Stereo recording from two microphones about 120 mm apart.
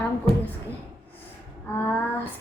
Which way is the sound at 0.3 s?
50° right (ahead or behind).